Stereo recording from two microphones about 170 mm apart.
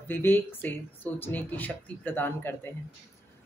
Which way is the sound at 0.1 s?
10° left (ahead or behind).